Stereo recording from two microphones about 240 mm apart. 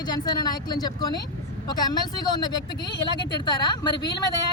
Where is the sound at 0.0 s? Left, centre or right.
Centre.